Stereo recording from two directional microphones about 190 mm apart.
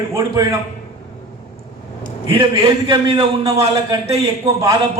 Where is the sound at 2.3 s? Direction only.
25° right (ahead or behind).